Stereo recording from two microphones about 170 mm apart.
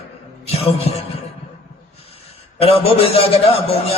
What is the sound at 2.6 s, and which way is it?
A man's voice, 35° left (ahead or behind).